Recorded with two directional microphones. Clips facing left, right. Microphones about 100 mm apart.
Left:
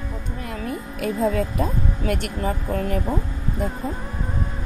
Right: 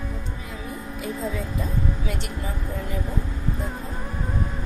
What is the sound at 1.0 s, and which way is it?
Speech, 65° left (ahead or behind).